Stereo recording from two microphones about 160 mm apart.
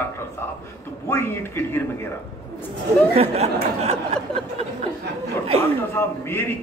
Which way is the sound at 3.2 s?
40° right (ahead or behind).